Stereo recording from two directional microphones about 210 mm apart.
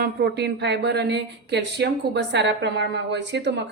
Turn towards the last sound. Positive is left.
turn(degrees=-55)  # may be behind; listen again after turning